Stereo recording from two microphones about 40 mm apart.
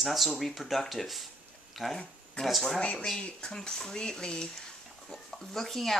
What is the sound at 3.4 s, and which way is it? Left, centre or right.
Speech, centre.